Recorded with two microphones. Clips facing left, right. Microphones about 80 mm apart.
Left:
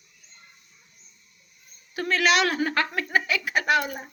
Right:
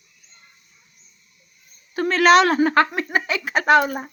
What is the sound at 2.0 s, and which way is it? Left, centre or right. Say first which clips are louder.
Speech: right 8 dB; right.